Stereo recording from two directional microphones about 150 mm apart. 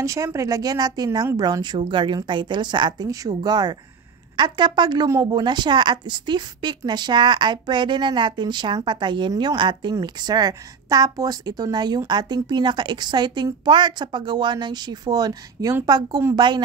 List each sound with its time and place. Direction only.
0.0 s a woman's voice: 20° right (ahead or behind)